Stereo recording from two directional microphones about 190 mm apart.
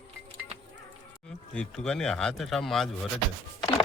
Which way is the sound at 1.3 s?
5° left (ahead or behind).